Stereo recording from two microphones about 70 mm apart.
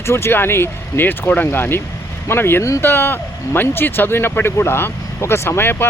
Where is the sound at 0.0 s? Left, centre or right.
Left.